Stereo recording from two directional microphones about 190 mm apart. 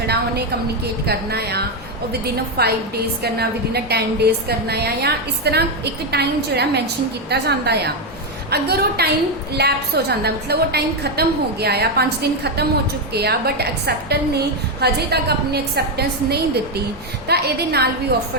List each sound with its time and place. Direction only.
1.0 s a woman's voice: 60° right (ahead or behind)